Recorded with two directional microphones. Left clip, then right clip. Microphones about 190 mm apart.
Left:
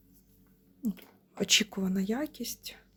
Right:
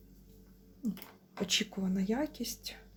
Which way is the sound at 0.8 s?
40° left (ahead or behind).